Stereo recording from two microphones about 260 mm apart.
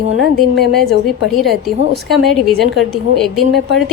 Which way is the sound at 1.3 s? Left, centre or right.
Centre.